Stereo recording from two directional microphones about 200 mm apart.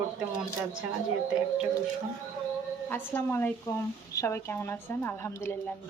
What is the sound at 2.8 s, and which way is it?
Speech, 10° left (ahead or behind).